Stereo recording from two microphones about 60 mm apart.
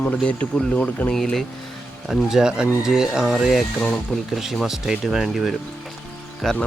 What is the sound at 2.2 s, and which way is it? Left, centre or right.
Speech, centre.